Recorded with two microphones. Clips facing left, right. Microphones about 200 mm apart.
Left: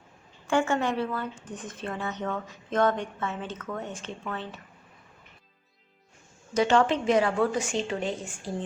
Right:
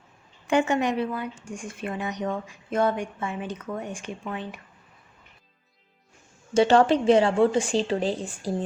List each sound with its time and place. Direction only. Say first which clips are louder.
0.4 s speech: right 3 dB; 20° right (ahead or behind)
6.5 s a woman's voice: right 4 dB; 30° right (ahead or behind)